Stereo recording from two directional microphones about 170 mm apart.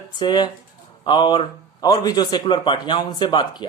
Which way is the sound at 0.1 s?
25° left (ahead or behind).